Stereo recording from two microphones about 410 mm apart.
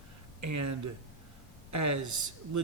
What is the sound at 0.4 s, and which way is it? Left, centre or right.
A man's voice, right.